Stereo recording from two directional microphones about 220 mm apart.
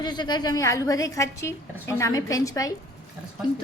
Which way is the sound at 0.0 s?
20° left (ahead or behind).